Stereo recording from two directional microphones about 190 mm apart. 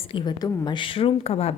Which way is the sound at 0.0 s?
25° left (ahead or behind).